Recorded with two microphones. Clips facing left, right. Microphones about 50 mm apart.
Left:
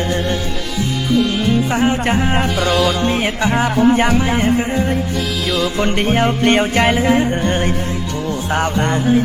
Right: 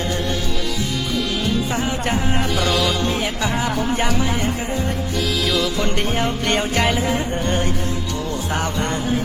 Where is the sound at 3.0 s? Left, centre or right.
Left.